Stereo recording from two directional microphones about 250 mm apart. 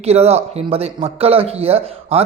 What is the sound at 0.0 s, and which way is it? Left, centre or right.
Speech, right.